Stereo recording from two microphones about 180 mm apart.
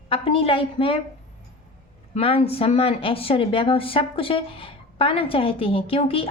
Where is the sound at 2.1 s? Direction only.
35° left (ahead or behind).